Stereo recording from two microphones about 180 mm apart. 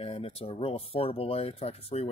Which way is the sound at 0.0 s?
30° left (ahead or behind).